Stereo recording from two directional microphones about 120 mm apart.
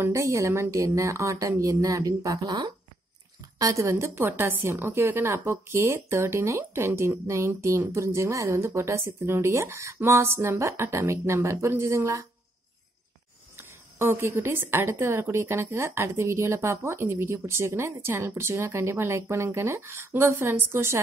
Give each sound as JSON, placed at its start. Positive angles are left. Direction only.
{"t": 0.0, "sound": "a woman's voice", "side_deg": -25}
{"t": 13.6, "sound": "a woman's voice", "side_deg": -20}